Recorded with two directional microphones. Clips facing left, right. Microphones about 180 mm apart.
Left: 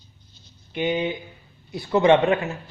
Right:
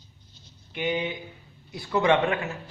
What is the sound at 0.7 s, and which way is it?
A man's voice, 25° left (ahead or behind).